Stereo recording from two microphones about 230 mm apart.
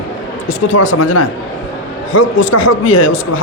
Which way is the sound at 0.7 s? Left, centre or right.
Left.